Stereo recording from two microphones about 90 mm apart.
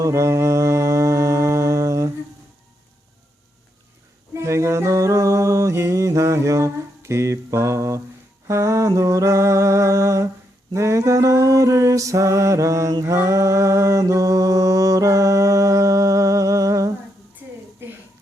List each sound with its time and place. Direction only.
0.0 s mantra: 35° right (ahead or behind)
4.4 s a sound: 30° right (ahead or behind)
8.4 s mantra: 35° right (ahead or behind)